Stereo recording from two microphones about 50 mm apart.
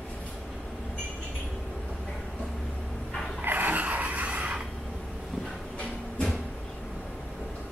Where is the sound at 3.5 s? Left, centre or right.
Right.